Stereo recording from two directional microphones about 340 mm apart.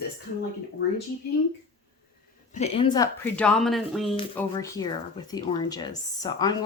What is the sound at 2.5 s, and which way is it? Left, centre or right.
Speech, centre.